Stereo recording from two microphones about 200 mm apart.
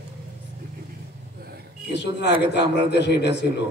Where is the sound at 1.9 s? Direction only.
60° left (ahead or behind).